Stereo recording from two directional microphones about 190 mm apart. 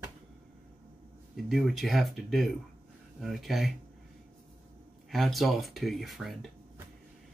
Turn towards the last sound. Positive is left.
turn(degrees=0)  # may be behind; listen again after turning